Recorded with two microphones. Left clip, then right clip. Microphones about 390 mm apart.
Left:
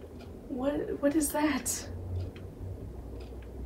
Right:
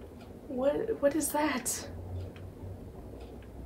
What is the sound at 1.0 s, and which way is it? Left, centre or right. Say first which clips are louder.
Speech: left 1 dB; centre.